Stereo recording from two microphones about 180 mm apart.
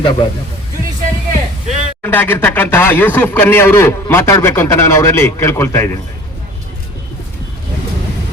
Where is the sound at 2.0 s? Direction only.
10° left (ahead or behind).